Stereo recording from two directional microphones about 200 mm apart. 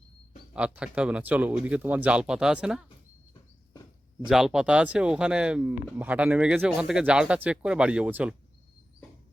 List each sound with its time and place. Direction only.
0.5 s speech: 5° right (ahead or behind)
4.3 s speech: centre (ahead or behind)